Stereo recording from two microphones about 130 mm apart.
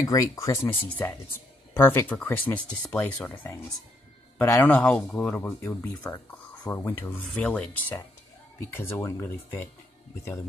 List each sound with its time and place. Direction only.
0.0 s speech: 25° left (ahead or behind)